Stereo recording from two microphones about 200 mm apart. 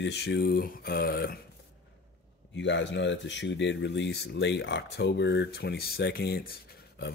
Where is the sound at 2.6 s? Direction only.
65° left (ahead or behind).